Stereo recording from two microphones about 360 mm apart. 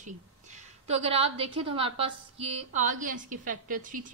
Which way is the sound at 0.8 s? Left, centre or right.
Centre.